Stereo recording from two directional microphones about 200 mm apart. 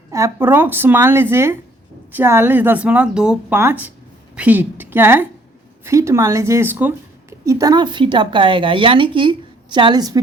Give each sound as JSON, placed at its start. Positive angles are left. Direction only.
{"t": 0.1, "sound": "speech", "side_deg": -15}